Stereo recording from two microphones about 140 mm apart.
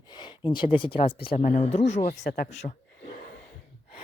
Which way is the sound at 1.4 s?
50° left (ahead or behind).